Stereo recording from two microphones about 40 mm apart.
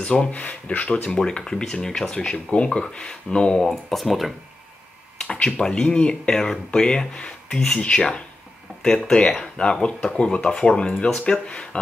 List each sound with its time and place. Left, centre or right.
0.0 s speech: left
1.1 s speech: left
3.9 s speech: centre
5.3 s speech: left